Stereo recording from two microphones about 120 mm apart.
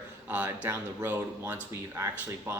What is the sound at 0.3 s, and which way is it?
Speech, 10° right (ahead or behind).